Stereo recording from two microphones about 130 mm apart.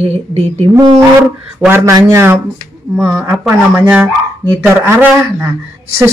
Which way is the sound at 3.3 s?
15° right (ahead or behind).